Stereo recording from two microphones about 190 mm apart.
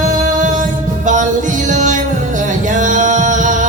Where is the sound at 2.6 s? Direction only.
40° right (ahead or behind).